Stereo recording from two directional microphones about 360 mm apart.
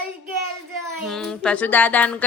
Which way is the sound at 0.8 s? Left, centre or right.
Centre.